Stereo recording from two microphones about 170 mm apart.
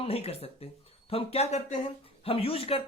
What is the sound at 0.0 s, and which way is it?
A woman's voice, 35° left (ahead or behind).